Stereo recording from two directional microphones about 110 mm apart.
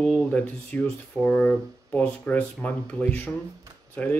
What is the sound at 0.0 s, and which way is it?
Speech, 10° left (ahead or behind).